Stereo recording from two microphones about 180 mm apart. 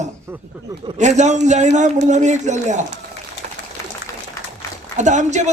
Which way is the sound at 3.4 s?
45° right (ahead or behind).